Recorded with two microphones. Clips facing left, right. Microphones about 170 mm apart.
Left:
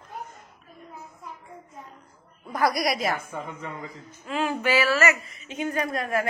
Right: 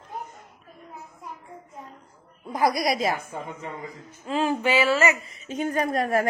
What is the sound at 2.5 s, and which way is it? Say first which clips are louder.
Speech: right 1 dB; 20° right (ahead or behind).